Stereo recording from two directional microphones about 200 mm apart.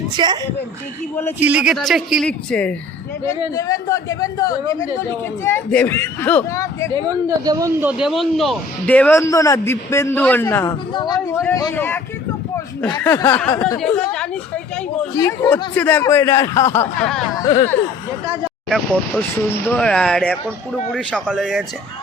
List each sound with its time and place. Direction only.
0.2 s speech: 25° right (ahead or behind)
1.4 s speech: 5° right (ahead or behind)
3.5 s speech: 15° left (ahead or behind)
6.9 s speech: 20° right (ahead or behind); by 11.9 s 10° left (ahead or behind)
13.0 s speech: 15° left (ahead or behind)
13.7 s speech: 5° left (ahead or behind)
15.1 s speech: 15° left (ahead or behind)
18.7 s speech: 5° left (ahead or behind)